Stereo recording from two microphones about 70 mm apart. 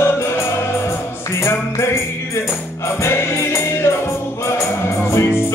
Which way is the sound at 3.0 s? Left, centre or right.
Left.